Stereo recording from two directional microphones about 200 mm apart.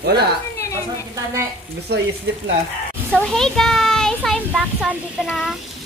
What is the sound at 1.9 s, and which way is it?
Speech, 55° right (ahead or behind).